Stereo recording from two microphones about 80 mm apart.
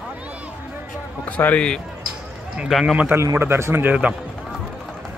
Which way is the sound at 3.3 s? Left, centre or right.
Right.